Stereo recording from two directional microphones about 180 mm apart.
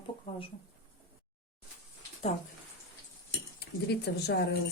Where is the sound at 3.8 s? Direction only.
65° left (ahead or behind).